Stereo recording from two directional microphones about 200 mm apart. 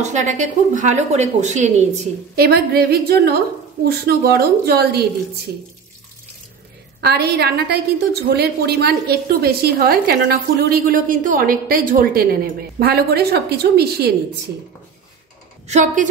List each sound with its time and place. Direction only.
0.0 s speech: 35° right (ahead or behind)
2.3 s a woman's voice: 50° right (ahead or behind)
7.0 s a woman's voice: 55° right (ahead or behind)
15.6 s speech: 35° right (ahead or behind)